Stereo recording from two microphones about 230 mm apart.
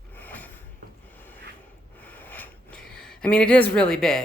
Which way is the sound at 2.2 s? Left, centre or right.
Centre.